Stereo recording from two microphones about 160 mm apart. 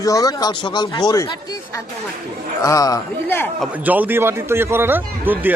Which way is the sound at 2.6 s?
20° left (ahead or behind).